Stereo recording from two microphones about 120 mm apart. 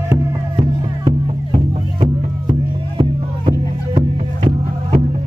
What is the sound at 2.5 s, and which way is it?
Music, 45° right (ahead or behind).